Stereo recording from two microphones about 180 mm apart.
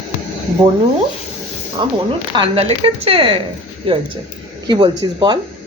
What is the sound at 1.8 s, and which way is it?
Speech, 25° right (ahead or behind).